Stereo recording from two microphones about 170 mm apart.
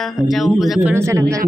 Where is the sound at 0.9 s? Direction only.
15° right (ahead or behind).